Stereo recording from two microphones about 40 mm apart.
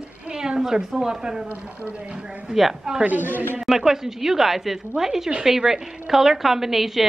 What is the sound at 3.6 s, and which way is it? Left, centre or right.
A woman's voice, centre.